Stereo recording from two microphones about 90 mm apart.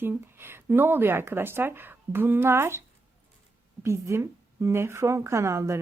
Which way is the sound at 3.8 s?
30° right (ahead or behind).